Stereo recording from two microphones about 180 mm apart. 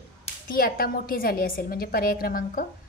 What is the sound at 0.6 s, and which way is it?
A woman's voice, 55° left (ahead or behind).